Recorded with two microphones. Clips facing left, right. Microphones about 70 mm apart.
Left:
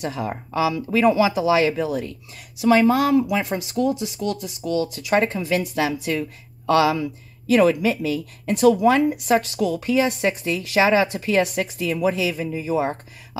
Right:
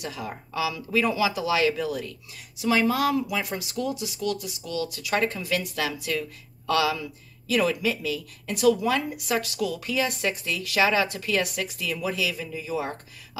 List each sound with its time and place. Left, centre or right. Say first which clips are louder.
0.0 s speech: left 7 dB; left